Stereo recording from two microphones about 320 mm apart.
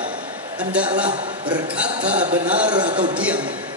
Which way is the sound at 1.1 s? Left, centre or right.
Centre.